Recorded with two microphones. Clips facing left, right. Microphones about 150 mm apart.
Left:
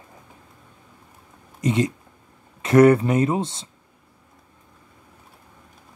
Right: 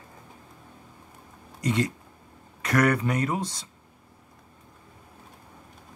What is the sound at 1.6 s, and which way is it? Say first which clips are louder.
Speech: left 4 dB; 20° left (ahead or behind).